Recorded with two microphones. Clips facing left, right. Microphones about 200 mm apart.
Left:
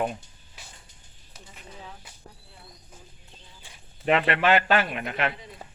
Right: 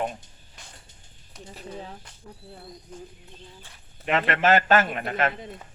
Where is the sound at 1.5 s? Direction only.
40° right (ahead or behind).